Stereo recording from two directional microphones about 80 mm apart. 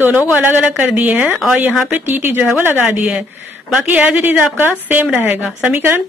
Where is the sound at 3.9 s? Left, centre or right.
Centre.